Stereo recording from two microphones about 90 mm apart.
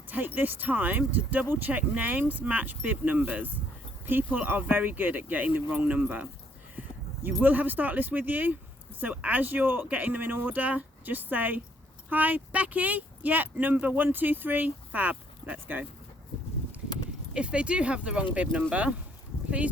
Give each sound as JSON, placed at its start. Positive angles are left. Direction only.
{"t": 0.3, "sound": "speech", "side_deg": -20}
{"t": 7.4, "sound": "speech", "side_deg": -20}
{"t": 17.3, "sound": "speech", "side_deg": -10}